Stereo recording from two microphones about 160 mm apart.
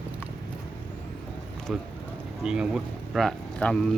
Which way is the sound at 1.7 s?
5° right (ahead or behind).